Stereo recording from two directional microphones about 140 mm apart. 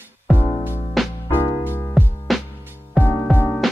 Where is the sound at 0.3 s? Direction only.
Centre (ahead or behind).